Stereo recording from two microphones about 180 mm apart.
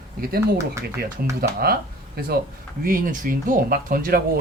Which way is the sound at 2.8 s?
50° right (ahead or behind).